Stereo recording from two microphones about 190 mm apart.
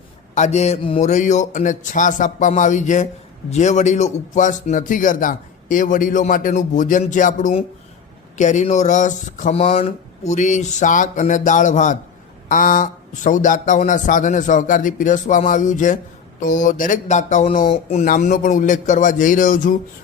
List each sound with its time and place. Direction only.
0.3 s speech: 40° left (ahead or behind)